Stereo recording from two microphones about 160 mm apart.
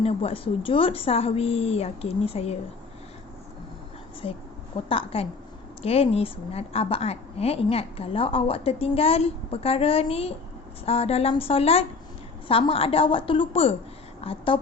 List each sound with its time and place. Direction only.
0.0 s a woman's voice: 35° left (ahead or behind)
4.2 s a woman's voice: 40° left (ahead or behind)